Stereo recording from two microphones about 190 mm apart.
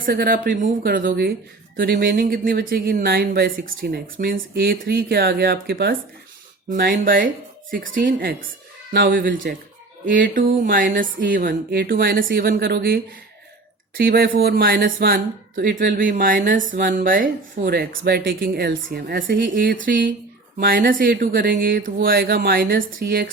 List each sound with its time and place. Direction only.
0.0 s a woman's voice: 50° right (ahead or behind)